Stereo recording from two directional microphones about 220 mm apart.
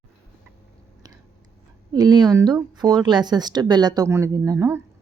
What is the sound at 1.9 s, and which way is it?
Speech, 15° right (ahead or behind).